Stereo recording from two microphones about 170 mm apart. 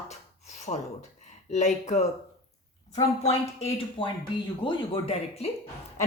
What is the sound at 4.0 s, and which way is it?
Speech, 30° left (ahead or behind).